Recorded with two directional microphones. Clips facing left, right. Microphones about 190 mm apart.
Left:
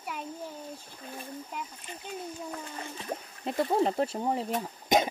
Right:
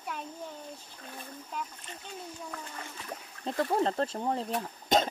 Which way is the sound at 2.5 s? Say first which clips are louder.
Left 3 dB; 25° left (ahead or behind).